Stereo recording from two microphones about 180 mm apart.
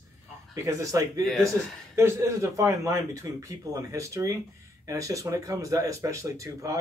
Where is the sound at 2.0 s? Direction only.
15° right (ahead or behind).